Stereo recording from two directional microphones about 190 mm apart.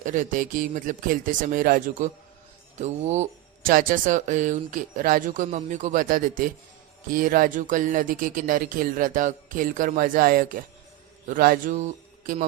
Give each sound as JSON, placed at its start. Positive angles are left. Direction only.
{"t": 0.0, "sound": "speech", "side_deg": -40}